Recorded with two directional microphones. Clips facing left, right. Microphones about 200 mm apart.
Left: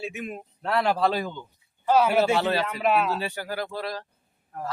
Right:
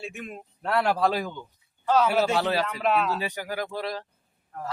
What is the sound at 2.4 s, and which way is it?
Speech, 10° right (ahead or behind).